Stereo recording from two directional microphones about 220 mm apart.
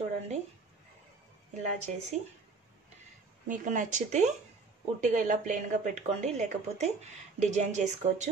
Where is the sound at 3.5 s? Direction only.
35° right (ahead or behind).